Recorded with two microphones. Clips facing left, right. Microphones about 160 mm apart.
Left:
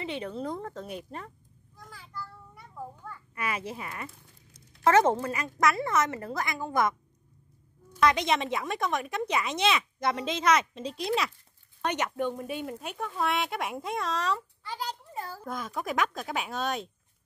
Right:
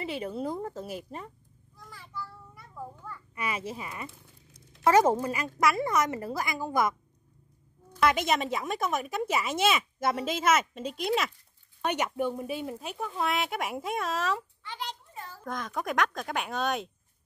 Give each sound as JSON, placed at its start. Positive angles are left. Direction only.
{"t": 0.0, "sound": "speech", "side_deg": -5}
{"t": 1.8, "sound": "child singing", "side_deg": 0}
{"t": 3.1, "sound": "a child's voice", "side_deg": 0}
{"t": 8.0, "sound": "speech", "side_deg": -5}
{"t": 14.6, "sound": "a sound", "side_deg": 40}
{"t": 15.4, "sound": "speech", "side_deg": 5}